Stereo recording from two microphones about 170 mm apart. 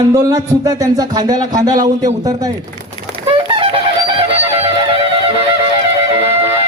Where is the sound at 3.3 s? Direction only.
30° right (ahead or behind).